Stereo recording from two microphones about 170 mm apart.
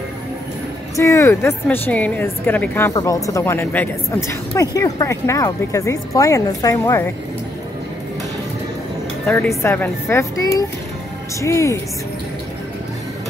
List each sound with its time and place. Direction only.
0.9 s a woman's voice: 15° left (ahead or behind)
9.2 s a woman's voice: 10° left (ahead or behind)